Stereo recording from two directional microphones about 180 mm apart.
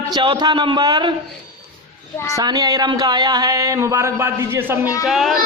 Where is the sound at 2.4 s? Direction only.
20° right (ahead or behind).